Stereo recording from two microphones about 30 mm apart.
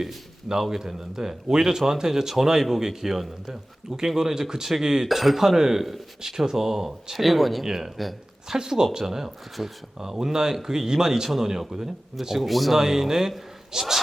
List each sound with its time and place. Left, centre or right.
0.4 s speech: centre
5.0 s speech: centre
5.5 s speech: centre
7.6 s speech: centre
12.4 s speech: centre
12.7 s speech: centre